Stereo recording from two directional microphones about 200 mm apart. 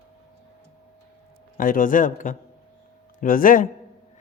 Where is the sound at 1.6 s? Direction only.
45° left (ahead or behind).